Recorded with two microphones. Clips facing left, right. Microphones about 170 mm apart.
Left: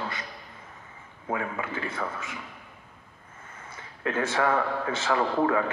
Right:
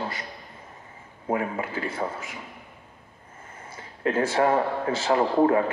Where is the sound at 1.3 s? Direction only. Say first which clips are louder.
Right 4 dB; 30° right (ahead or behind).